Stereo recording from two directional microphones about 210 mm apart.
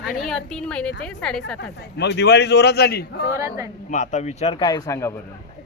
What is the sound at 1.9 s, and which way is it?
A man's voice, 55° left (ahead or behind).